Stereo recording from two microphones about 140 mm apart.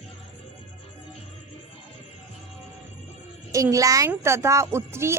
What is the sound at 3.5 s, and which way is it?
A woman's voice, 25° right (ahead or behind).